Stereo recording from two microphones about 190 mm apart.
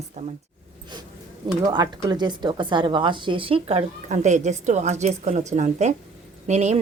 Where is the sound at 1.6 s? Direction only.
20° right (ahead or behind).